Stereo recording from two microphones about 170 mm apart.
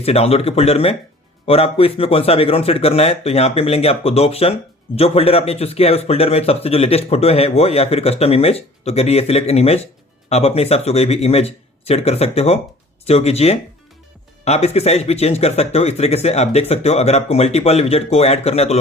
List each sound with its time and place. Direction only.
0.0 s a man's voice: 35° left (ahead or behind)